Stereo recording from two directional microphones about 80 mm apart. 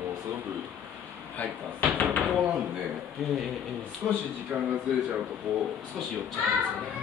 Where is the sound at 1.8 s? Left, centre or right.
Centre.